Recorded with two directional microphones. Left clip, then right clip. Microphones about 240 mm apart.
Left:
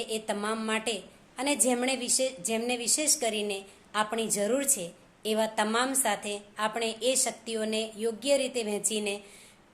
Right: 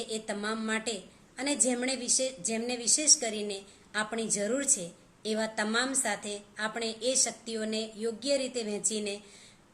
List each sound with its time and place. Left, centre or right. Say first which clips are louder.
0.1 s a woman's voice: left 3 dB; centre